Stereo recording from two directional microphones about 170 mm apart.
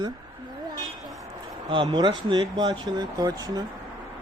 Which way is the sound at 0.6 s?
25° right (ahead or behind).